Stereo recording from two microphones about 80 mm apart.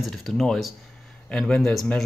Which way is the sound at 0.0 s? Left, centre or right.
Centre.